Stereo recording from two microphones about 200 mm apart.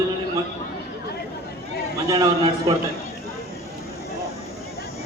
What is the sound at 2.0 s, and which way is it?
Speech, 20° right (ahead or behind).